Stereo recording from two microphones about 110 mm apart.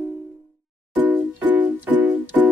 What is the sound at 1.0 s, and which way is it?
Music, 15° right (ahead or behind).